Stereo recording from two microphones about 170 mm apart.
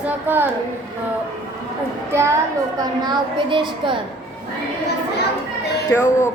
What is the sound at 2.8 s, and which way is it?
A woman's voice, 25° right (ahead or behind).